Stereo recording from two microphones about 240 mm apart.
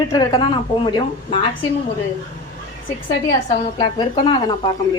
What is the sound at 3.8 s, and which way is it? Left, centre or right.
Speech, centre.